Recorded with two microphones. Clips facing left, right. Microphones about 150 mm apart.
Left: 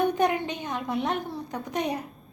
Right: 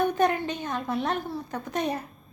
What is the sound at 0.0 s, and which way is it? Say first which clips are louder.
A woman's voice: even; 15° left (ahead or behind).